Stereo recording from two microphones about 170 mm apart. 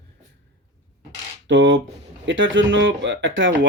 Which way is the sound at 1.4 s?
90° right.